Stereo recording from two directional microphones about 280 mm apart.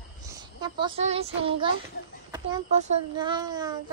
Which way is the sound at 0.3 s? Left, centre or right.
Centre.